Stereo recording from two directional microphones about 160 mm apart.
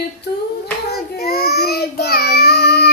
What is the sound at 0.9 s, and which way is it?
Child singing, 80° left.